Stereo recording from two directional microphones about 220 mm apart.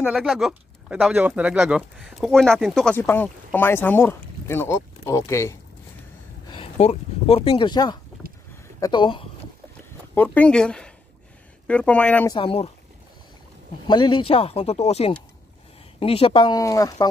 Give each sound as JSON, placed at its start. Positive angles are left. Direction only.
{"t": 0.0, "sound": "speech", "side_deg": -5}
{"t": 6.5, "sound": "speech", "side_deg": 25}
{"t": 10.1, "sound": "speech", "side_deg": 5}
{"t": 12.4, "sound": "speech", "side_deg": 25}
{"t": 13.8, "sound": "speech", "side_deg": 20}